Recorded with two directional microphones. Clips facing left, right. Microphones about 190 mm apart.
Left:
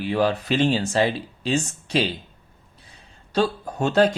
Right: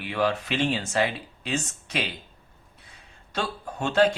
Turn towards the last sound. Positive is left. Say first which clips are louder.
# left 3 dB
turn(degrees=40)  # may be behind; listen again after turning